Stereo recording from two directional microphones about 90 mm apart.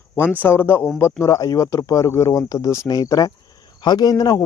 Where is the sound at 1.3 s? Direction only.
40° left (ahead or behind).